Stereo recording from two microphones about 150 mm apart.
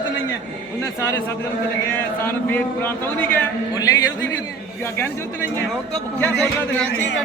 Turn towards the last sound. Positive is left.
turn(degrees=10)  # may be behind; listen again after turning